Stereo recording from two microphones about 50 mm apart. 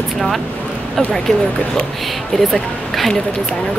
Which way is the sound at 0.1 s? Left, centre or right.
Centre.